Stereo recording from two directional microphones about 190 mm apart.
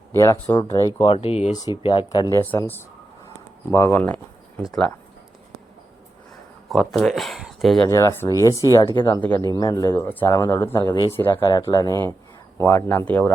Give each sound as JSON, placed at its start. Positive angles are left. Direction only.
{"t": 0.2, "sound": "speech", "side_deg": 15}
{"t": 0.9, "sound": "speech", "side_deg": 30}
{"t": 2.3, "sound": "speech", "side_deg": 10}
{"t": 6.7, "sound": "speech", "side_deg": 0}
{"t": 7.9, "sound": "speech", "side_deg": 15}